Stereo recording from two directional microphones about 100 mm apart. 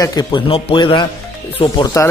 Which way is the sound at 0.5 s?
60° left (ahead or behind).